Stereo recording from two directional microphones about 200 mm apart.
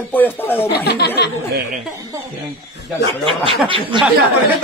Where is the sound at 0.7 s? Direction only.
55° left (ahead or behind).